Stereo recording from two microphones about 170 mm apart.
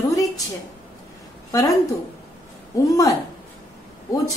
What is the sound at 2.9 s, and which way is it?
Speech, 20° left (ahead or behind).